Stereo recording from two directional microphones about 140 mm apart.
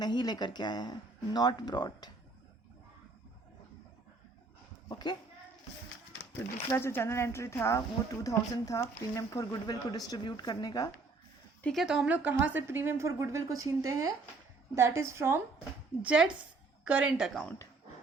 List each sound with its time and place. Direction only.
0.0 s speech: 30° left (ahead or behind)
4.9 s speech: 30° left (ahead or behind)
6.7 s speech: 20° left (ahead or behind)
11.6 s a woman's voice: centre (ahead or behind); by 15.4 s 20° right (ahead or behind)
16.0 s a woman's voice: 10° right (ahead or behind)